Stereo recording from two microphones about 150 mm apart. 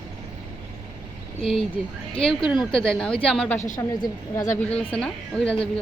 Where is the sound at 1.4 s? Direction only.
Centre (ahead or behind).